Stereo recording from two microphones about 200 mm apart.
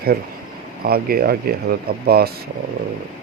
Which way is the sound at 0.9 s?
50° right (ahead or behind).